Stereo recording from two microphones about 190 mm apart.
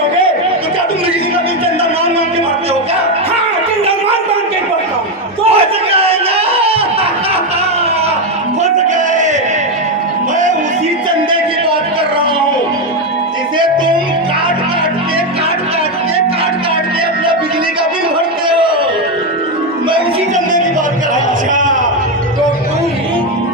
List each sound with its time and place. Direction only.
5.5 s crowd: 30° right (ahead or behind)
13.6 s music: 25° right (ahead or behind)
21.5 s a sound: 45° right (ahead or behind)